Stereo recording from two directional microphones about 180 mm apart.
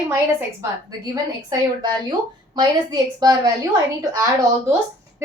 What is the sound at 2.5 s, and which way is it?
A woman's voice, 20° right (ahead or behind).